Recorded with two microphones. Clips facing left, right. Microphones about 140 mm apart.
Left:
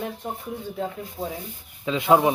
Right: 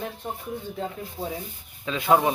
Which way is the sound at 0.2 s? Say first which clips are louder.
Left 1 dB; 5° left (ahead or behind).